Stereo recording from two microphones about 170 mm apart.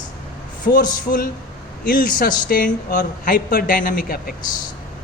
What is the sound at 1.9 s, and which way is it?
A man's voice, 55° left (ahead or behind).